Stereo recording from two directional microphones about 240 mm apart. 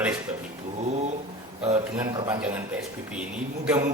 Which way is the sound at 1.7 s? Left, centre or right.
Centre.